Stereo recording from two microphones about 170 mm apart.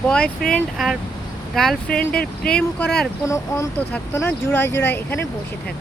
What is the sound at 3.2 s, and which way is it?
Speech, 15° left (ahead or behind).